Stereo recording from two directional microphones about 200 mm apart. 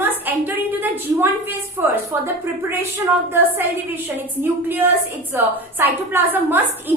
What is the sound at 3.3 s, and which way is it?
A woman's voice, 10° right (ahead or behind).